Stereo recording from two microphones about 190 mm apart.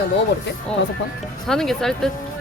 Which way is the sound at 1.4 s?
Centre (ahead or behind).